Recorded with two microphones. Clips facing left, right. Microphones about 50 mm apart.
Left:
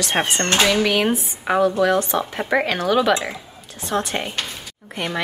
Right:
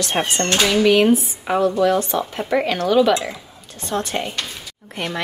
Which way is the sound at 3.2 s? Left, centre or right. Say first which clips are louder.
Even; centre.